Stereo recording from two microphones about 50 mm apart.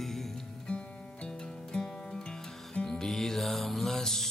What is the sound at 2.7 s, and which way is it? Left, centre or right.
Music, centre.